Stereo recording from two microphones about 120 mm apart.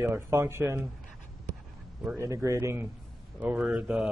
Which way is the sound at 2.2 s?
25° right (ahead or behind).